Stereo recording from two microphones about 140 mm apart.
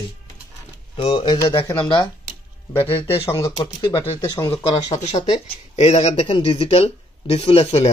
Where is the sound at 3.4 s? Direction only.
35° left (ahead or behind).